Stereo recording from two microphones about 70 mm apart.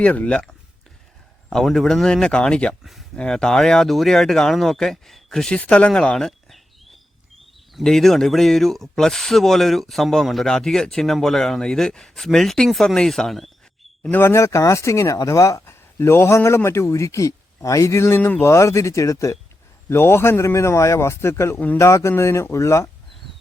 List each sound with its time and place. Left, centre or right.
0.0 s speech: centre
1.5 s speech: centre
2.8 s speech: centre
3.2 s speech: centre
5.5 s speech: centre
5.9 s speech: centre
14.1 s a man's voice: left
15.6 s a man's voice: left
19.9 s a man's voice: left